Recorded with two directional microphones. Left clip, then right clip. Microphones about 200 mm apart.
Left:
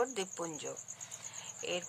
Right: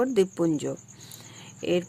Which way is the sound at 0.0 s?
30° right (ahead or behind).